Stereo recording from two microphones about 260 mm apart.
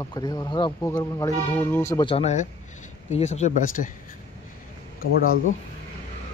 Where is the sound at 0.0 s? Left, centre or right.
Centre; by 3.9 s left.